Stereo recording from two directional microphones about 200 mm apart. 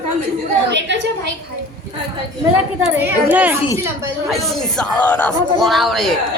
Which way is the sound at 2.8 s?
10° right (ahead or behind).